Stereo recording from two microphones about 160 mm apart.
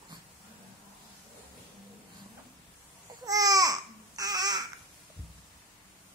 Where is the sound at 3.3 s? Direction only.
25° right (ahead or behind).